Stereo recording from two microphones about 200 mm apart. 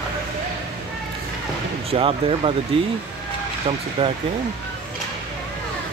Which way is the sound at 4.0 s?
30° right (ahead or behind).